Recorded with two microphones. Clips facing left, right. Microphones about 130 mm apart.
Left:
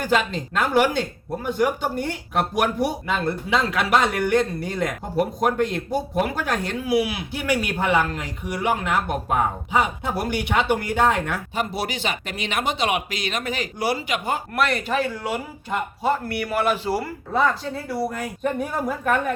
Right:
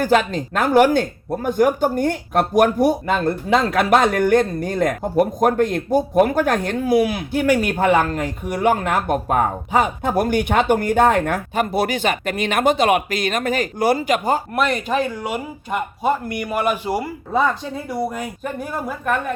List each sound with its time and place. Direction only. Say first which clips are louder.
0.0 s speech: right 5 dB; 45° right (ahead or behind)
14.5 s speech: right 3 dB; 20° right (ahead or behind)
18.4 s speech: left 4 dB; centre (ahead or behind)